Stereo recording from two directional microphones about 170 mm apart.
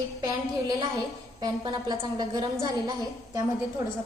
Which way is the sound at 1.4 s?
25° right (ahead or behind).